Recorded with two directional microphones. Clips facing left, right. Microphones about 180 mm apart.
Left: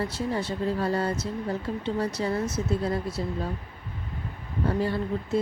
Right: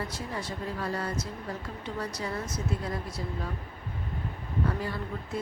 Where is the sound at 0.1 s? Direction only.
30° left (ahead or behind).